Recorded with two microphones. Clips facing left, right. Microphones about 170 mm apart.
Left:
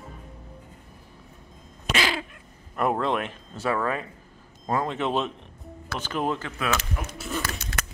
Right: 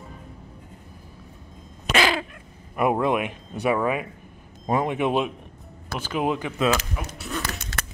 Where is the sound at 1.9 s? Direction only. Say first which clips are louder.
Right 5 dB; 55° right (ahead or behind).